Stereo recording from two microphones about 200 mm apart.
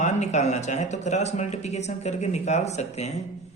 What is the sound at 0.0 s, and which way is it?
Speech, 35° left (ahead or behind).